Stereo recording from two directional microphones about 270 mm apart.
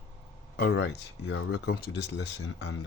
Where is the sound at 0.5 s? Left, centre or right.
Left.